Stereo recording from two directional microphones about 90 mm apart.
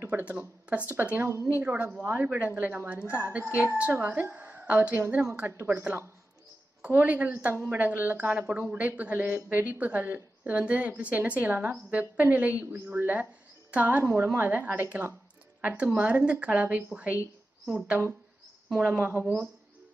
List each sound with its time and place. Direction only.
0.0 s a woman's voice: 20° right (ahead or behind)
14.0 s a woman's voice: 25° right (ahead or behind)